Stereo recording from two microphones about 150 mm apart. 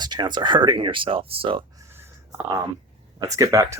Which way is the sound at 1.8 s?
15° right (ahead or behind).